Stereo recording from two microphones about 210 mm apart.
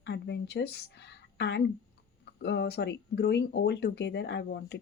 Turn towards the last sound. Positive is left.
turn(degrees=55)  # may be behind; listen again after turning